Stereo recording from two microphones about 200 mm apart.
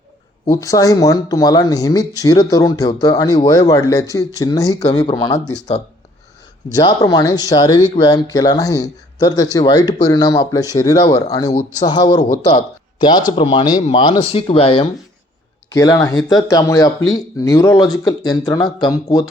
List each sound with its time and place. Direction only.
0.5 s speech: 15° left (ahead or behind)
5.5 s speech: 35° left (ahead or behind)
6.7 s speech: 20° left (ahead or behind)
15.7 s speech: 15° left (ahead or behind)